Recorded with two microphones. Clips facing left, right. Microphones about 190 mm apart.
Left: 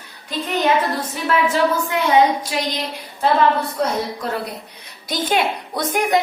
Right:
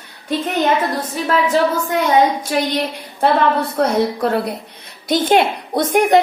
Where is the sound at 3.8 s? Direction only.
60° right (ahead or behind).